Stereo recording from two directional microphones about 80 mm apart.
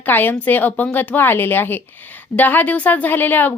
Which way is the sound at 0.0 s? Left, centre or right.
Left.